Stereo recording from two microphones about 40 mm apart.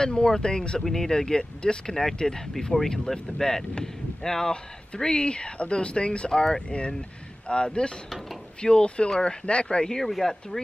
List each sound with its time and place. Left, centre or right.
0.0 s speech: centre
0.8 s speech: centre
9.9 s speech: centre